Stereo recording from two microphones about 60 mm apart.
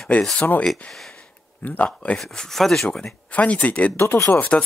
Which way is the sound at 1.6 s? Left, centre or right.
Left.